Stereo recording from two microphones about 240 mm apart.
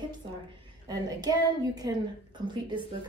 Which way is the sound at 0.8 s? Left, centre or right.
Centre.